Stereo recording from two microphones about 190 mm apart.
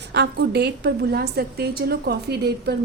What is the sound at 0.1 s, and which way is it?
A woman's voice, 60° right (ahead or behind).